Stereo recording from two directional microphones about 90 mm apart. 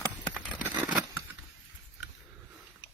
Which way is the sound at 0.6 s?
15° right (ahead or behind).